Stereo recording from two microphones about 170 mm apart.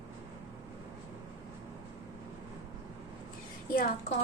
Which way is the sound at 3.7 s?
60° left (ahead or behind).